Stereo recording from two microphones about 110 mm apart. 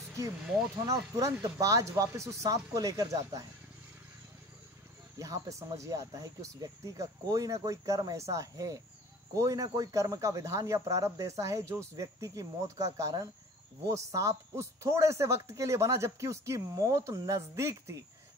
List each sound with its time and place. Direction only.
0.8 s speech: 30° right (ahead or behind)
5.2 s a man's voice: 30° right (ahead or behind)